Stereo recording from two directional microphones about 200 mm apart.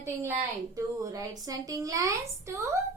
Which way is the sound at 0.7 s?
15° right (ahead or behind).